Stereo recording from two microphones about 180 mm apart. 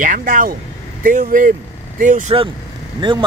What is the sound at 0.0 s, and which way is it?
Speech, 50° right (ahead or behind).